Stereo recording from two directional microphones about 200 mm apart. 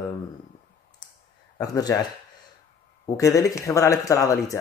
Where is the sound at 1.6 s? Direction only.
20° left (ahead or behind).